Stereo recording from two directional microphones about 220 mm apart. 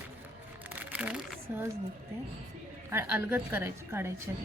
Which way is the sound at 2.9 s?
10° right (ahead or behind).